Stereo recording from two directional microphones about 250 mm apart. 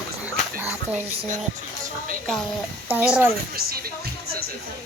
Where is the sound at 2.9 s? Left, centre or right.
Centre.